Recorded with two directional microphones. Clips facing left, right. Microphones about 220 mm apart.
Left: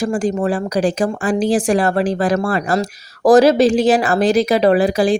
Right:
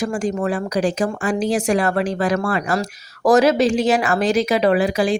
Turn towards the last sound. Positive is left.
turn(degrees=35)  # may be behind; listen again after turning